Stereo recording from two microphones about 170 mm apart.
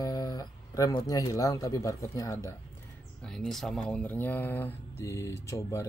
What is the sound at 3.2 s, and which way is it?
Speech, 5° left (ahead or behind).